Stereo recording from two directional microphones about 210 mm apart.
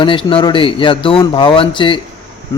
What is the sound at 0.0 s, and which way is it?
A man's voice, 25° left (ahead or behind).